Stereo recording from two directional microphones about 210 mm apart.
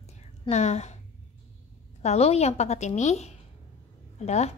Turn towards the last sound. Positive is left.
turn(degrees=30)  # may be behind; listen again after turning